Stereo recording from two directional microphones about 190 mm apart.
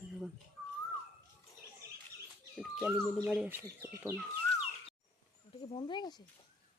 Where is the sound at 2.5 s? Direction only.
Centre (ahead or behind).